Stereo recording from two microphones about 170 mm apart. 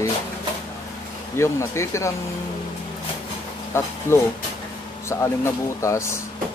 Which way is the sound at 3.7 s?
15° left (ahead or behind).